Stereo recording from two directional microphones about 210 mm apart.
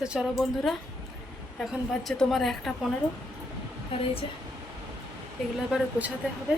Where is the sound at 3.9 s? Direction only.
25° left (ahead or behind).